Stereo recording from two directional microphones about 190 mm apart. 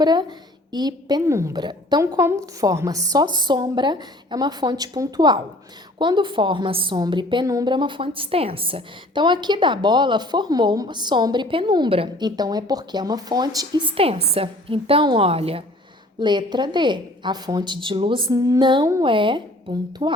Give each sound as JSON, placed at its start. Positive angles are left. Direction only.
{"t": 0.0, "sound": "a woman's voice", "side_deg": -20}